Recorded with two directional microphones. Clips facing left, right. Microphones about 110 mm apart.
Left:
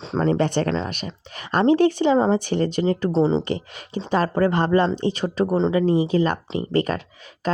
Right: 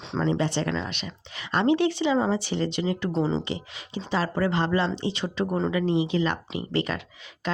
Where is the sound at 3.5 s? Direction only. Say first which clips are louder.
Left 6 dB; 50° left (ahead or behind).